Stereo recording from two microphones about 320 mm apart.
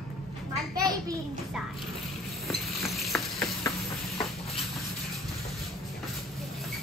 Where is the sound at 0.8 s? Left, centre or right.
Centre.